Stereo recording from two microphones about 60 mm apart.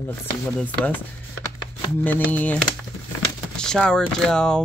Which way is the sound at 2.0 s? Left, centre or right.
Left.